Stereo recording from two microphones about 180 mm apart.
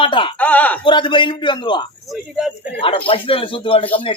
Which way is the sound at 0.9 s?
25° left (ahead or behind).